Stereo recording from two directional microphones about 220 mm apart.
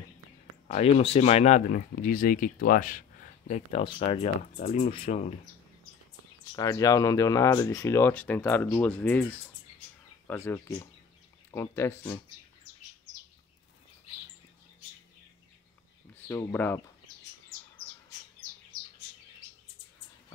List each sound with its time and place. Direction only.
0.7 s speech: 30° left (ahead or behind)
6.5 s speech: 15° left (ahead or behind)
16.3 s speech: 10° left (ahead or behind)